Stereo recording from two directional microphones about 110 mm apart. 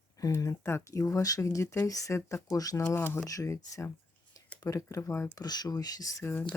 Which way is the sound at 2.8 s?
20° left (ahead or behind).